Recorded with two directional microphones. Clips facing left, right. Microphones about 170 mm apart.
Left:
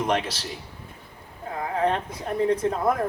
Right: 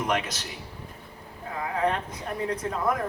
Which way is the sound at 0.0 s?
30° left (ahead or behind).